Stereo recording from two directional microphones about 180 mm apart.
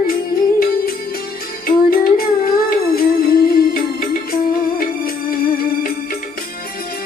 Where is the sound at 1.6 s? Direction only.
55° left (ahead or behind).